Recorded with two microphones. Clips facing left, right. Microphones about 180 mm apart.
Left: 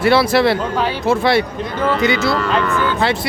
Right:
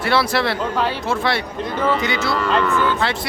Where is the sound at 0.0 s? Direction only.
5° left (ahead or behind).